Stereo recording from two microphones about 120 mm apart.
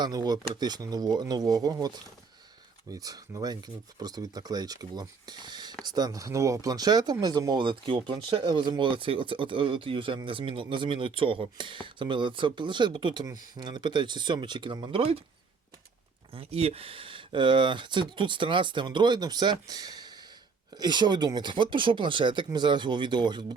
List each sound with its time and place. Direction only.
0.0 s speech: 35° right (ahead or behind); by 15.2 s 50° right (ahead or behind)
16.3 s speech: 55° right (ahead or behind); by 23.6 s 40° right (ahead or behind)